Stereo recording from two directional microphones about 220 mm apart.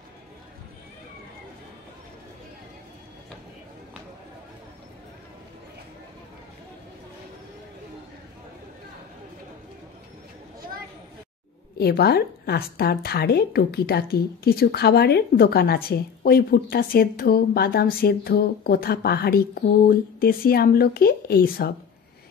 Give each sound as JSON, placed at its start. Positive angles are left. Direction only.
{"t": 11.8, "sound": "a woman's voice", "side_deg": 45}